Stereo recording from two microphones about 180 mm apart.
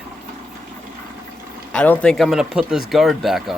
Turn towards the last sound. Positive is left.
turn(degrees=0)  # may be behind; listen again after turning